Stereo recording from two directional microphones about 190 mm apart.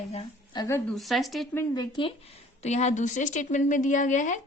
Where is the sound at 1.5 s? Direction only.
15° left (ahead or behind).